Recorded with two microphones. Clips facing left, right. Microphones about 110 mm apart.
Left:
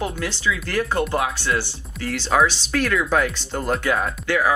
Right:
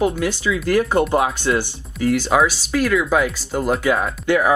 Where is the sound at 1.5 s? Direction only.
10° right (ahead or behind).